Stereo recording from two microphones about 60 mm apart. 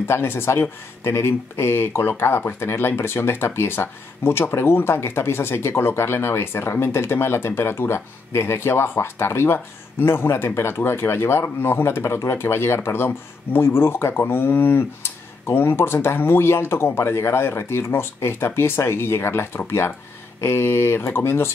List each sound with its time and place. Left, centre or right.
0.1 s speech: left